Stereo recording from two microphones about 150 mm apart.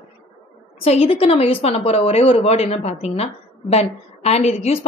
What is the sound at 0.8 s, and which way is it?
A woman's voice, 40° left (ahead or behind).